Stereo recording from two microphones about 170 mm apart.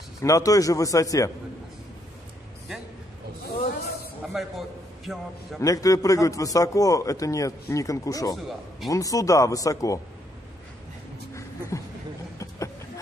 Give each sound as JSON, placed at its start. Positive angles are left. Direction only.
{"t": 0.2, "sound": "a man's voice", "side_deg": 20}
{"t": 4.3, "sound": "a man's voice", "side_deg": 0}
{"t": 5.6, "sound": "a man's voice", "side_deg": 20}
{"t": 11.7, "sound": "speech", "side_deg": 20}
{"t": 12.4, "sound": "a sound", "side_deg": 20}